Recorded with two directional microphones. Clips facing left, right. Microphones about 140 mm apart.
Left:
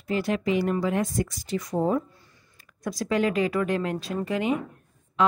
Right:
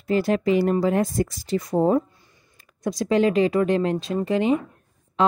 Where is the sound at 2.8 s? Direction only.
20° right (ahead or behind).